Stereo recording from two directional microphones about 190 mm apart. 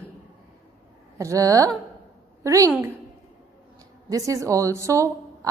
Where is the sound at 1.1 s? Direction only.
15° right (ahead or behind).